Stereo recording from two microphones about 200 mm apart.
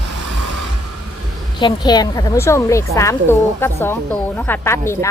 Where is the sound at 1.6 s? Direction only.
20° left (ahead or behind).